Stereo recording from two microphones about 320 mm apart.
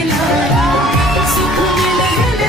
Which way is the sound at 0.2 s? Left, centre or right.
Centre.